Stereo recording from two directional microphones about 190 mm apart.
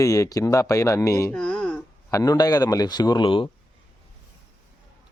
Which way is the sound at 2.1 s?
20° left (ahead or behind).